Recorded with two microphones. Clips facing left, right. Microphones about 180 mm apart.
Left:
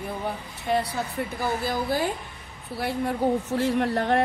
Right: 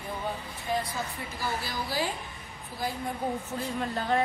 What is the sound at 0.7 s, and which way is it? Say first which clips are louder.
Speech: left 6 dB; 70° left (ahead or behind).